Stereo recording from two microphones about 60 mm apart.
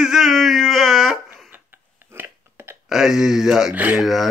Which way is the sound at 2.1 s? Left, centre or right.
Right.